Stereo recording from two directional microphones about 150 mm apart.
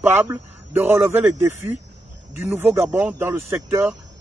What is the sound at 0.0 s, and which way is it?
Speech, 15° right (ahead or behind).